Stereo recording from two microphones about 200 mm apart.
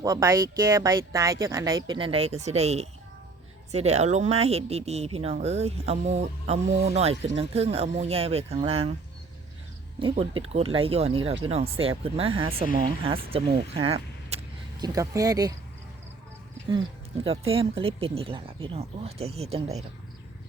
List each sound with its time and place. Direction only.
0.0 s speech: 15° right (ahead or behind)
10.0 s speech: 25° right (ahead or behind)
13.1 s vehicle: 30° right (ahead or behind)
14.9 s speech: 15° right (ahead or behind)
17.2 s speech: 30° right (ahead or behind)